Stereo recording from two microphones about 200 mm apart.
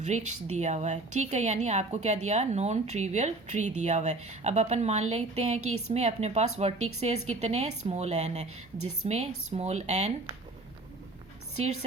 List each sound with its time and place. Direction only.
0.0 s a woman's voice: 35° right (ahead or behind)
5.5 s a woman's voice: 90° right
5.9 s a woman's voice: 35° right (ahead or behind)
11.5 s a woman's voice: 35° right (ahead or behind)